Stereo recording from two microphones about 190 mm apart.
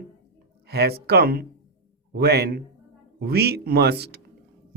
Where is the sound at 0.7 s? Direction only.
55° right (ahead or behind).